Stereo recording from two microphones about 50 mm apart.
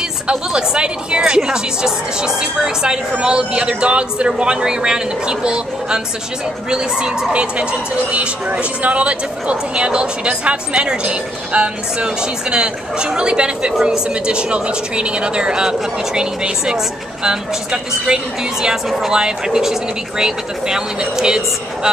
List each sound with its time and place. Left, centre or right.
0.3 s speech: centre